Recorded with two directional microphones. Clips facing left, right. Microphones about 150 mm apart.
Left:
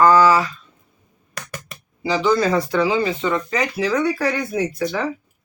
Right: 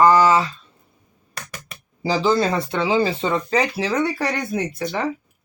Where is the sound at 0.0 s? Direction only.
20° right (ahead or behind).